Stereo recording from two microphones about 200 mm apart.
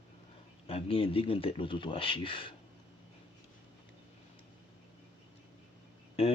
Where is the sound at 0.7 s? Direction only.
30° left (ahead or behind).